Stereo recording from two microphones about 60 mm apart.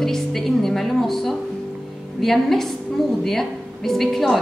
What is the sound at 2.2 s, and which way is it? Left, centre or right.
Speech, centre.